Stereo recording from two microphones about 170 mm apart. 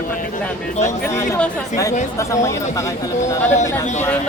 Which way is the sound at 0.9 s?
15° left (ahead or behind).